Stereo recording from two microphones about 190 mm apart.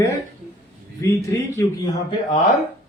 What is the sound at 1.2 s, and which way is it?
Speech, 15° left (ahead or behind).